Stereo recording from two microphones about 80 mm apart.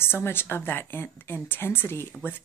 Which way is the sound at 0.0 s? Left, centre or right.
Left.